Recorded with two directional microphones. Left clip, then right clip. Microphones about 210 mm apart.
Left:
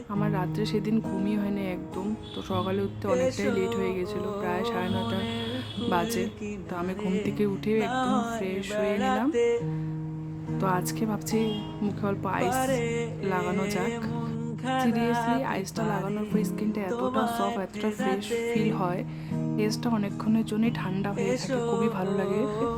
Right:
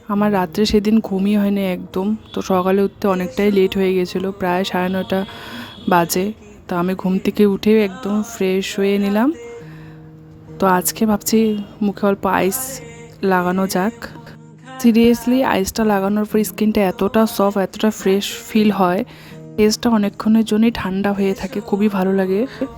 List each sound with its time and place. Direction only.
0.1 s speech: 45° right (ahead or behind)
10.6 s speech: 45° right (ahead or behind)